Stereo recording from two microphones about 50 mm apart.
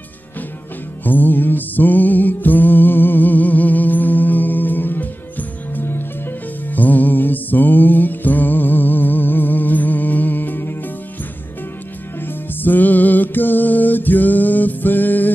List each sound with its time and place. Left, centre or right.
1.0 s music: left
6.7 s music: left
12.2 s music: left